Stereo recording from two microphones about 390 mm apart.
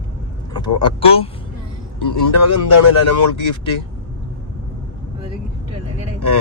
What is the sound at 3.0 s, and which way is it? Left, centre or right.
Speech, left.